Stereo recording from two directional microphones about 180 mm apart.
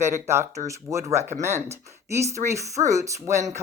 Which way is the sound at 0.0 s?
15° right (ahead or behind).